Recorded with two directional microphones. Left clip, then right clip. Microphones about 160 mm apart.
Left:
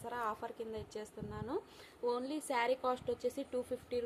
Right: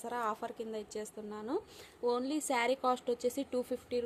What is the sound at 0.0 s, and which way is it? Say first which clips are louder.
A woman's voice: right 3 dB; 45° right (ahead or behind).